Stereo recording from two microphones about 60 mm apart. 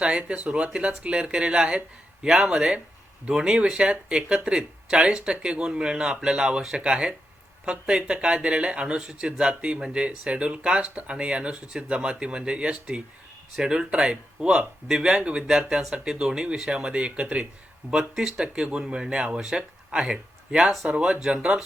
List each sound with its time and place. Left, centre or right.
0.0 s speech: centre
17.9 s speech: centre